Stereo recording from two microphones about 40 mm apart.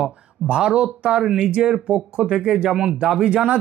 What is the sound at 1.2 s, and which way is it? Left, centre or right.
Speech, centre.